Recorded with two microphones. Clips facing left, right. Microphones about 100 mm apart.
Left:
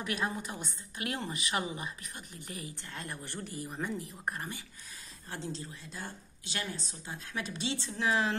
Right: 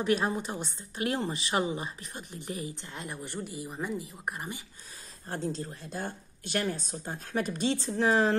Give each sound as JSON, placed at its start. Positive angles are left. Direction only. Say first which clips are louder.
{"t": 0.0, "sound": "a woman's voice", "louder": "right 7 dB", "side_deg": -25}
{"t": 5.3, "sound": "speech", "louder": "right 6 dB", "side_deg": -45}